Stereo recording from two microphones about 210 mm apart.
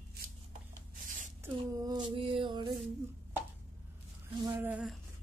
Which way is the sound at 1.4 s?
20° right (ahead or behind).